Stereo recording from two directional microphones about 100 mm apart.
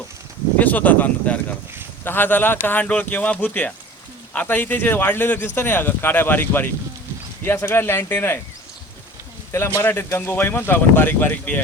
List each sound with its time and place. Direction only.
0.6 s speech: 15° left (ahead or behind)
9.5 s speech: 25° left (ahead or behind)